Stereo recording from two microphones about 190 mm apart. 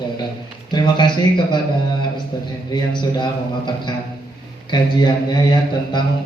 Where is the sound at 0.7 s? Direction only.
25° left (ahead or behind).